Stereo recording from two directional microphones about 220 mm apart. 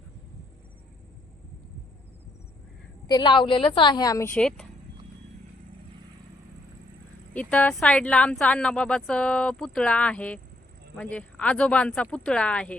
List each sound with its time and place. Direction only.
3.1 s speech: 20° left (ahead or behind); by 4.6 s 5° left (ahead or behind)
7.3 s speech: 5° left (ahead or behind)